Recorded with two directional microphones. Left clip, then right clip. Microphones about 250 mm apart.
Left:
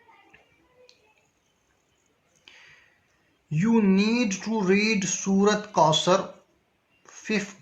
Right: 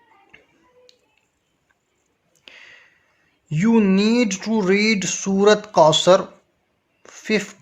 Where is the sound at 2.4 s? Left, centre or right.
Right.